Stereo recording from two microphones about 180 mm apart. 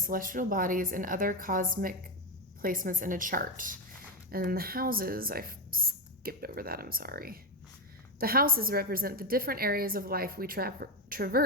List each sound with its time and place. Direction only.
0.0 s a woman's voice: 50° right (ahead or behind)